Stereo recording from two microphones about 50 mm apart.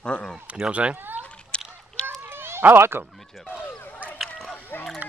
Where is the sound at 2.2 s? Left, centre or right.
Right.